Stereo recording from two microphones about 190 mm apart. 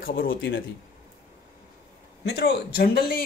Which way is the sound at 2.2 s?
60° left (ahead or behind).